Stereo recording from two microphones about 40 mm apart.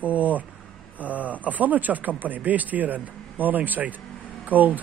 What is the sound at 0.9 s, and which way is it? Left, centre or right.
A man's voice, right.